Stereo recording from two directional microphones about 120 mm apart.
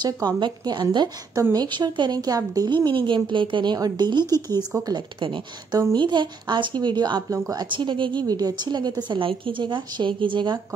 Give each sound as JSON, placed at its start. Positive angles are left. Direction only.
{"t": 0.0, "sound": "a woman's voice", "side_deg": -35}
{"t": 5.2, "sound": "a woman's voice", "side_deg": -45}
{"t": 7.7, "sound": "a woman's voice", "side_deg": -40}